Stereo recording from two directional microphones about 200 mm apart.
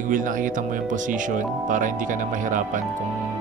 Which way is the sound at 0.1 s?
40° right (ahead or behind).